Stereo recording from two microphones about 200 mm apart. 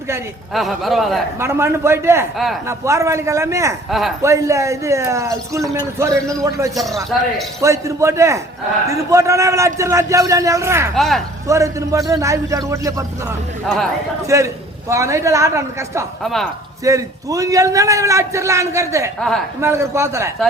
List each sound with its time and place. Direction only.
0.5 s a man's voice: centre (ahead or behind)
1.4 s a man's voice: 15° right (ahead or behind)
3.8 s a man's voice: centre (ahead or behind)
4.2 s a man's voice: 15° right (ahead or behind)
6.7 s a man's voice: centre (ahead or behind)
7.6 s a man's voice: 15° right (ahead or behind)
10.9 s a man's voice: centre (ahead or behind)
11.4 s a man's voice: 15° right (ahead or behind)
13.7 s a man's voice: centre (ahead or behind)
14.3 s a man's voice: 15° right (ahead or behind)
16.2 s a man's voice: centre (ahead or behind)
16.8 s a man's voice: 15° right (ahead or behind)